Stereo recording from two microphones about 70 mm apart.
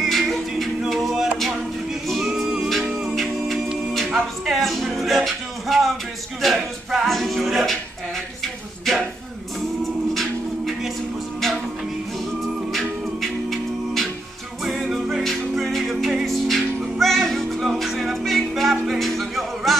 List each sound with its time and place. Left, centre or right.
0.0 s music: centre
2.0 s a capella: centre
2.9 s music: centre
10.1 s music: centre
13.2 s music: centre